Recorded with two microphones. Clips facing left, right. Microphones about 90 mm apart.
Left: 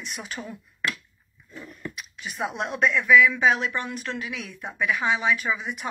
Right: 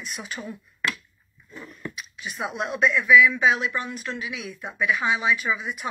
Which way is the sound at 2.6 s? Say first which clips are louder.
Right 1 dB; 50° left (ahead or behind).